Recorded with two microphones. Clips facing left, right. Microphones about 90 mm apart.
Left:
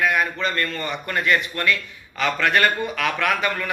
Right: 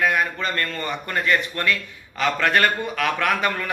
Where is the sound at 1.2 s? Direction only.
30° right (ahead or behind).